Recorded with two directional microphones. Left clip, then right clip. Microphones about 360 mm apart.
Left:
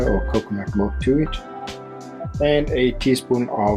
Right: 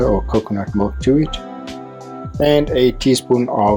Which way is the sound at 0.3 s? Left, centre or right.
Centre.